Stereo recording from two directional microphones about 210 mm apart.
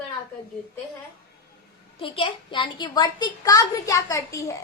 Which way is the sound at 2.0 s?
25° left (ahead or behind).